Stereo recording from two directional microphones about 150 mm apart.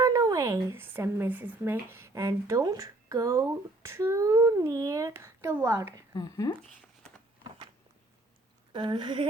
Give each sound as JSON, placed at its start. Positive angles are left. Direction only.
{"t": 0.0, "sound": "speech", "side_deg": -25}
{"t": 6.1, "sound": "speech", "side_deg": 25}
{"t": 8.7, "sound": "speech", "side_deg": -30}